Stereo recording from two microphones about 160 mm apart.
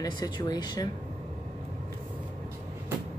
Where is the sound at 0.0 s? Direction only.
25° left (ahead or behind).